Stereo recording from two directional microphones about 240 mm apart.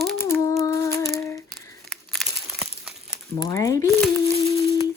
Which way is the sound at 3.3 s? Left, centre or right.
Centre.